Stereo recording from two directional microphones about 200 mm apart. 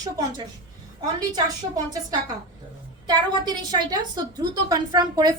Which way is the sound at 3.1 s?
20° right (ahead or behind).